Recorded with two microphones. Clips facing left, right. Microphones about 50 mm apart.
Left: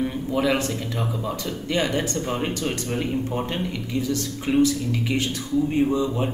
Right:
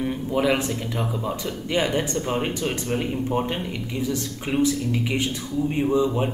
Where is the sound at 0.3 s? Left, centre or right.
Centre.